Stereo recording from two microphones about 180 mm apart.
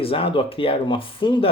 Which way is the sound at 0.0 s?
30° left (ahead or behind).